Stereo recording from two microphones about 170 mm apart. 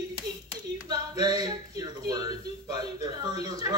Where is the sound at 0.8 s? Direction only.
20° right (ahead or behind).